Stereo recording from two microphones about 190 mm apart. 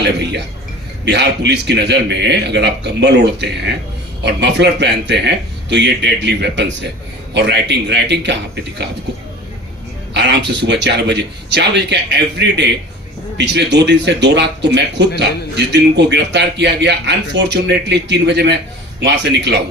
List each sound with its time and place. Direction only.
1.0 s speech: 65° right (ahead or behind)
10.2 s speech: 65° right (ahead or behind)